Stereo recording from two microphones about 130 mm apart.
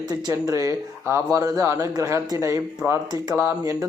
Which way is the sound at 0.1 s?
30° right (ahead or behind).